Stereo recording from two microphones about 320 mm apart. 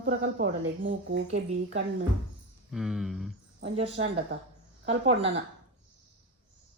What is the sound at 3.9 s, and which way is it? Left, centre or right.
Speech, right.